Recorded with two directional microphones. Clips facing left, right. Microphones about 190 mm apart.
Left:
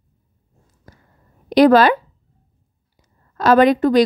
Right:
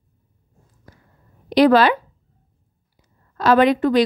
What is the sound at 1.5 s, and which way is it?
Speech, 45° left (ahead or behind).